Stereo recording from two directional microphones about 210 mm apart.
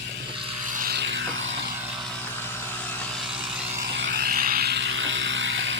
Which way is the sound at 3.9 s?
55° right (ahead or behind).